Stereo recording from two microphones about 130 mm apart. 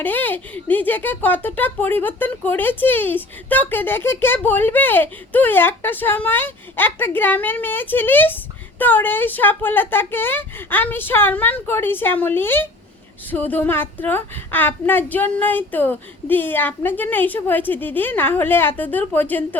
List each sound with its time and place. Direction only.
0.0 s speech: 15° left (ahead or behind)